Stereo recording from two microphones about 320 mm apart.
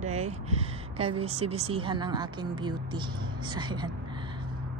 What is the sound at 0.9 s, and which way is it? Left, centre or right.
Speech, centre.